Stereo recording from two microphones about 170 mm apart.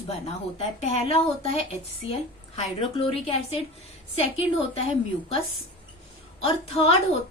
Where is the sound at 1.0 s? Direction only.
35° left (ahead or behind).